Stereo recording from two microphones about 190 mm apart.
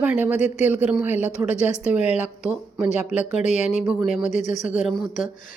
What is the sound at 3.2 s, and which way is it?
Speech, 35° left (ahead or behind).